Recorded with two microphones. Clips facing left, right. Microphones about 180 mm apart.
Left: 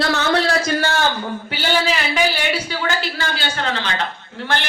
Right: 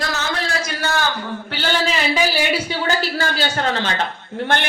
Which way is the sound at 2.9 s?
40° right (ahead or behind).